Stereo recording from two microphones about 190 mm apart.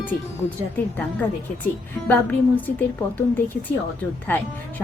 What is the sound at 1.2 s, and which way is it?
A woman's voice, 10° left (ahead or behind).